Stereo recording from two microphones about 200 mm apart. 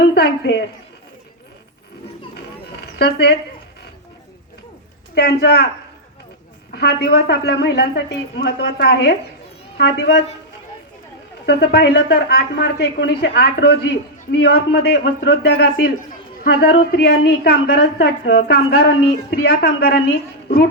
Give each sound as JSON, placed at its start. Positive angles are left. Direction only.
{"t": 0.1, "sound": "a woman's voice", "side_deg": 55}
{"t": 3.0, "sound": "speech", "side_deg": 55}
{"t": 5.1, "sound": "speech", "side_deg": 55}
{"t": 6.7, "sound": "a woman's voice", "side_deg": 55}
{"t": 11.4, "sound": "speech", "side_deg": 55}